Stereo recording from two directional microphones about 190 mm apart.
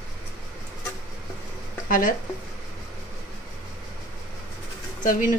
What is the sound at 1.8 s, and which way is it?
Speech, 45° left (ahead or behind).